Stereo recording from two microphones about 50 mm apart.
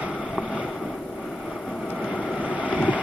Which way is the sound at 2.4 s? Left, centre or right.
Right.